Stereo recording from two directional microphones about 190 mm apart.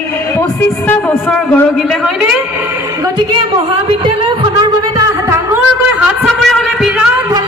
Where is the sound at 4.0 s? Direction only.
20° right (ahead or behind).